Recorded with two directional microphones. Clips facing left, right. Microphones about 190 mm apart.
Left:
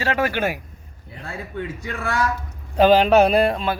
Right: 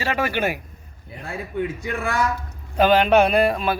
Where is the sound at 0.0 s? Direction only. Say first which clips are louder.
Left 1 dB; 15° right (ahead or behind).